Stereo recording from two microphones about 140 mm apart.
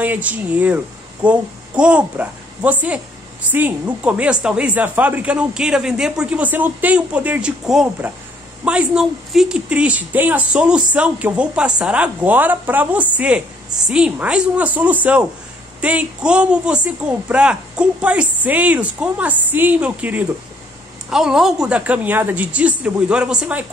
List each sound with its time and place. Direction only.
0.0 s a woman's voice: 10° right (ahead or behind)